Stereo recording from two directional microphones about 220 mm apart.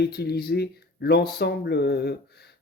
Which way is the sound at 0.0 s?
45° left (ahead or behind).